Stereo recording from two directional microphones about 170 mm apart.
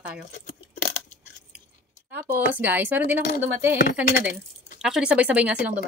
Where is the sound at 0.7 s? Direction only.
45° left (ahead or behind).